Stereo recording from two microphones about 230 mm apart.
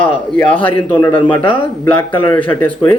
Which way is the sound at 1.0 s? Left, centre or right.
Centre.